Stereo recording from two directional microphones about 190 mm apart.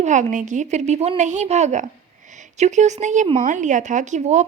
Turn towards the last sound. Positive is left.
turn(degrees=-40)  # may be behind; listen again after turning